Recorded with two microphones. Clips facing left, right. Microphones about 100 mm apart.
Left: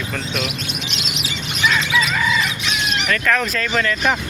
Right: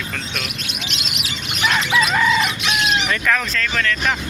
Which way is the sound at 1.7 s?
60° right (ahead or behind).